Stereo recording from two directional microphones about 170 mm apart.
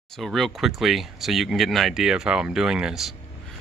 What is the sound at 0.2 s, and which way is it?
Speech, centre (ahead or behind).